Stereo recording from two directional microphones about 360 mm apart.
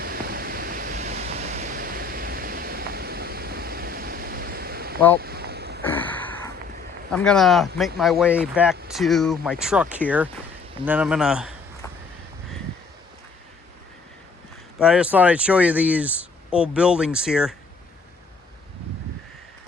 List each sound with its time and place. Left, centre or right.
0.0 s pink noise: right
5.2 s boat: right
5.8 s a sound: centre
7.1 s speech: centre
14.8 s speech: centre